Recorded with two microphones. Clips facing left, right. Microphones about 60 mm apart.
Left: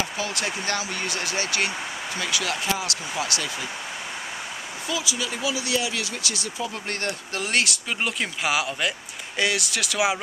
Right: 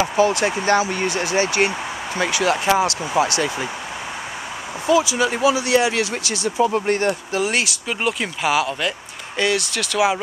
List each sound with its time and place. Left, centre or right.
0.0 s speech: right
4.8 s speech: right
6.9 s speech: centre
7.3 s speech: centre